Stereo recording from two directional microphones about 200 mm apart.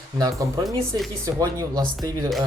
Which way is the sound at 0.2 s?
15° right (ahead or behind).